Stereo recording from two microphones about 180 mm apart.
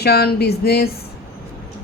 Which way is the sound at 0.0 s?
60° left (ahead or behind).